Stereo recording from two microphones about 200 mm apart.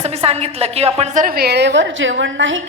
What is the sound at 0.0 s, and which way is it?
A woman's voice, 30° right (ahead or behind).